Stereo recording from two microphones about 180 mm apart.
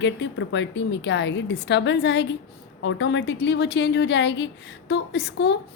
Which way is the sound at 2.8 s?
90° left.